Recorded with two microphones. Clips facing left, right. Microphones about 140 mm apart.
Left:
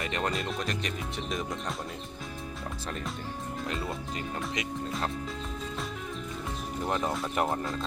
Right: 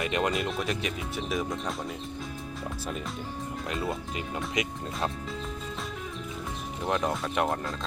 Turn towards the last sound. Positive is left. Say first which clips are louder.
# right 1 dB
turn(degrees=0)  # may be behind; listen again after turning